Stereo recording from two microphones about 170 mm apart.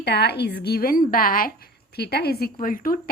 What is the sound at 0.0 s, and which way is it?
Speech, 75° left (ahead or behind).